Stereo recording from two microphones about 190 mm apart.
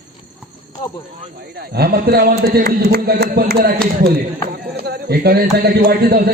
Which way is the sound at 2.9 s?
55° right (ahead or behind).